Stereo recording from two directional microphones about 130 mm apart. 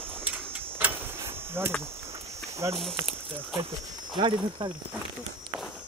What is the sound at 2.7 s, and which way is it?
Speech, centre (ahead or behind).